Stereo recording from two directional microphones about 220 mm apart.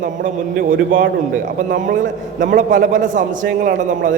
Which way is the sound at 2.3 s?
35° right (ahead or behind).